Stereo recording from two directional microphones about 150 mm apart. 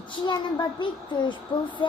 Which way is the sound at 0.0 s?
30° left (ahead or behind).